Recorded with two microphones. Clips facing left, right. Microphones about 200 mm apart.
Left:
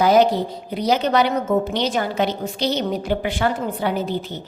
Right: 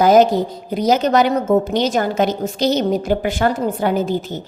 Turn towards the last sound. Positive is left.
turn(degrees=-45)  # may be behind; listen again after turning